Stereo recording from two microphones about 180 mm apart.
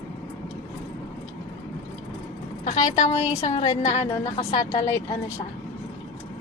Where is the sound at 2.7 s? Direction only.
40° left (ahead or behind).